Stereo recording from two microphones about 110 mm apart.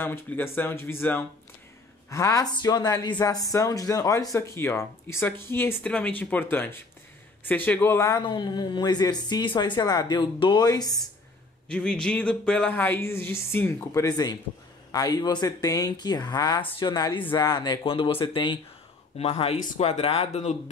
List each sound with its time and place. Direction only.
0.0 s speech: 20° left (ahead or behind)
2.5 s speech: 40° left (ahead or behind); by 8.1 s 20° left (ahead or behind)
8.1 s speech: 45° left (ahead or behind)
11.7 s speech: 10° left (ahead or behind); by 18.6 s 45° left (ahead or behind)
19.1 s speech: 65° left (ahead or behind)